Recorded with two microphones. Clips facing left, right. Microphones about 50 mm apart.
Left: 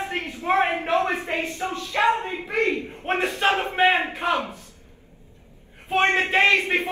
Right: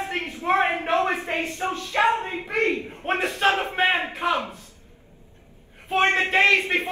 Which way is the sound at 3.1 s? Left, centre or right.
Centre.